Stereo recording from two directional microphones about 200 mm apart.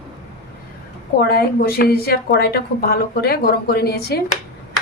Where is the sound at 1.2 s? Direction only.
50° left (ahead or behind).